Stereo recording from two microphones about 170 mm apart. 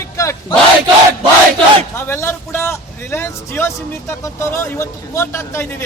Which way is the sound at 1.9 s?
15° left (ahead or behind).